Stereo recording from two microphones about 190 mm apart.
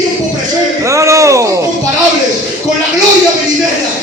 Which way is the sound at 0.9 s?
15° right (ahead or behind).